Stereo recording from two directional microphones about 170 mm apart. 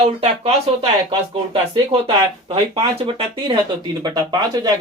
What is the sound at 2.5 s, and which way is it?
Speech, 35° right (ahead or behind).